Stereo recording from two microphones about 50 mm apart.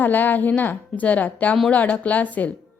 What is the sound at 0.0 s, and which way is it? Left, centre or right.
A woman's voice, left.